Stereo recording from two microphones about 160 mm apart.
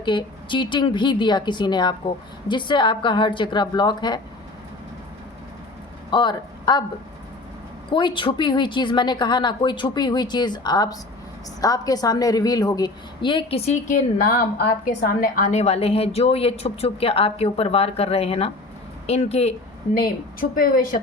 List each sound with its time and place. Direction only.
0.0 s a woman's voice: 30° left (ahead or behind)
6.1 s speech: 30° left (ahead or behind)
7.9 s a woman's voice: 30° left (ahead or behind)
20.4 s a woman's voice: 60° left (ahead or behind)